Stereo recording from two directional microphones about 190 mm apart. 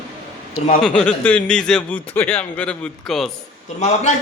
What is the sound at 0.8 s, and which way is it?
A man's voice, 5° left (ahead or behind).